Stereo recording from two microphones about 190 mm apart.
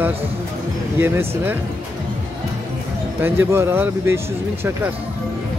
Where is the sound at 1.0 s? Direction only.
10° right (ahead or behind).